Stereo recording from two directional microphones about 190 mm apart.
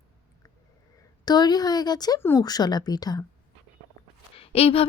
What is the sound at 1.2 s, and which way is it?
A woman's voice, 20° left (ahead or behind).